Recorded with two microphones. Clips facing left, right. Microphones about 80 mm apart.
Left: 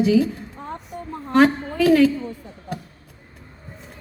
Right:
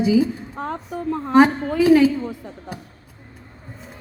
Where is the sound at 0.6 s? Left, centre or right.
Right.